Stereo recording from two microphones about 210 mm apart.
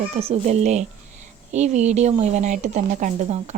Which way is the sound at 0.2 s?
30° right (ahead or behind).